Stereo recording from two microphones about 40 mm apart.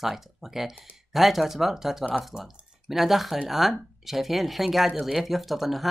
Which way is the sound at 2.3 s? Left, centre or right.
Right.